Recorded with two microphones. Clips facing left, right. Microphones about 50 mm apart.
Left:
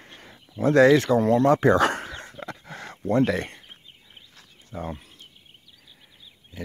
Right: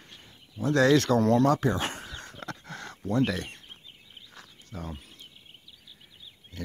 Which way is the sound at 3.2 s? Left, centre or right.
Left.